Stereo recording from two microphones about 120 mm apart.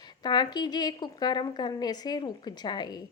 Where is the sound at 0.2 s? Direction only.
35° left (ahead or behind).